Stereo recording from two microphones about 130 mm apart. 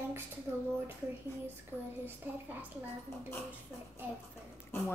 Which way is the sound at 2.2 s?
15° right (ahead or behind).